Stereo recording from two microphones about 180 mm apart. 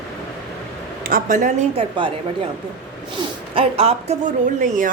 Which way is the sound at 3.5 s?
35° right (ahead or behind).